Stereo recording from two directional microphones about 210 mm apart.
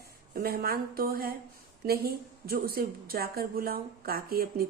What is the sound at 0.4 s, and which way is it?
A woman's voice, 45° right (ahead or behind).